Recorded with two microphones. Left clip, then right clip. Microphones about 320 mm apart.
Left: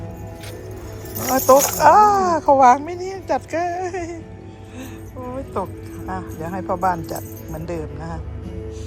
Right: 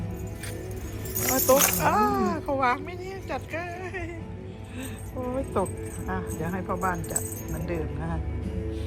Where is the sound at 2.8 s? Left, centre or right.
Left.